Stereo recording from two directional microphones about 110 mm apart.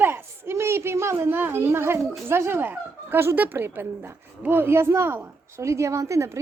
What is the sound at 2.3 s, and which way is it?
A woman's voice, 25° right (ahead or behind).